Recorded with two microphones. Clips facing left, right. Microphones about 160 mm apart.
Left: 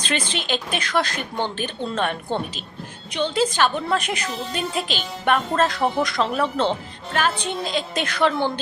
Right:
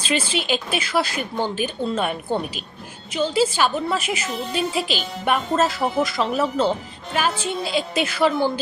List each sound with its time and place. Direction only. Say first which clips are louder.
0.0 s a woman's voice: right 3 dB; 5° right (ahead or behind)